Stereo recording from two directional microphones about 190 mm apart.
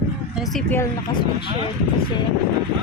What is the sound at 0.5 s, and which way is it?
Speech, 10° left (ahead or behind).